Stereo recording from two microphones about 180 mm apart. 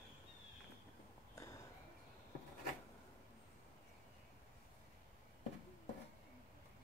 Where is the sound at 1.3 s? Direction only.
20° left (ahead or behind).